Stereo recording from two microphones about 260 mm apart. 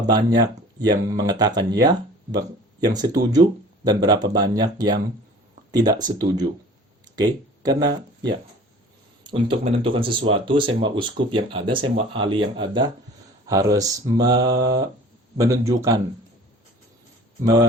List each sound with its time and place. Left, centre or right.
0.1 s speech: centre
9.2 s speech: centre
14.5 s mantra: right
15.4 s speech: centre
17.4 s speech: centre